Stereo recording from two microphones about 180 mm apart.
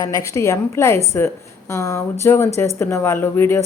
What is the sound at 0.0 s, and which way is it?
A woman's voice, 20° left (ahead or behind).